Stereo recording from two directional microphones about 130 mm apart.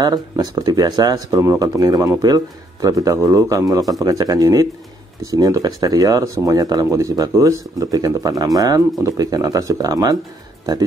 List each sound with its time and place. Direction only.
0.0 s speech: 30° right (ahead or behind)